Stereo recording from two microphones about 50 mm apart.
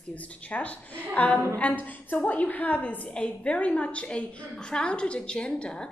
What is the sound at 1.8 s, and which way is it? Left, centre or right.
A woman's voice, left.